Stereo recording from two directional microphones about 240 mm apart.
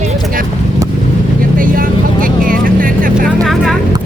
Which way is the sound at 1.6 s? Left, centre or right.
Right.